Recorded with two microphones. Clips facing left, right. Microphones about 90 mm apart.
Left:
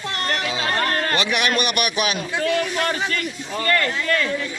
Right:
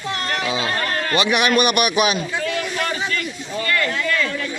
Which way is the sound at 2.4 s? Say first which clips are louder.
Left 2 dB; 40° left (ahead or behind).